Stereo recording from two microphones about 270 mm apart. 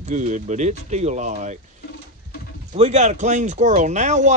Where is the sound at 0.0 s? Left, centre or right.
Right.